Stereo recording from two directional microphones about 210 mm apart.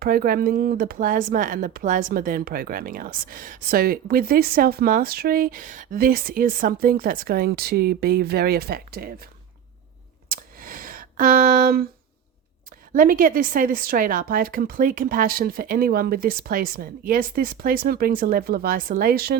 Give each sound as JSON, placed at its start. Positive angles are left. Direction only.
{"t": 0.0, "sound": "speech", "side_deg": -45}
{"t": 10.2, "sound": "a sound", "side_deg": -45}
{"t": 12.9, "sound": "speech", "side_deg": -40}